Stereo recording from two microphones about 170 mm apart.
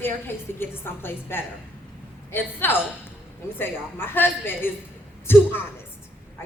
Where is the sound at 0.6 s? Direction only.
10° left (ahead or behind).